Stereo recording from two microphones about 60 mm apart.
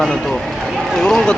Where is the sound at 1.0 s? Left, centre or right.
Centre.